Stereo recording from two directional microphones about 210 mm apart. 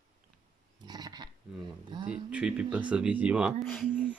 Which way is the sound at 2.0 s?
5° right (ahead or behind).